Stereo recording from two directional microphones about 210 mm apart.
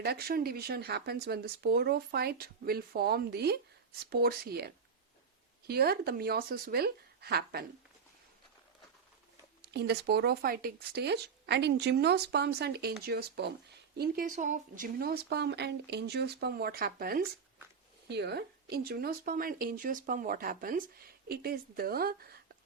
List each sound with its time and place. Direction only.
0.0 s speech: 45° right (ahead or behind)
9.7 s speech: 50° right (ahead or behind)